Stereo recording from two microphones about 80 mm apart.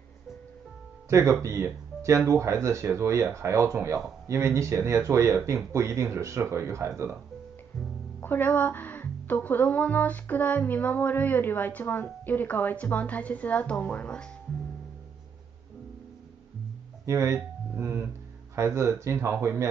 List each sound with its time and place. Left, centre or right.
1.0 s music: right
1.4 s speech: right
8.2 s speech: left
17.0 s speech: right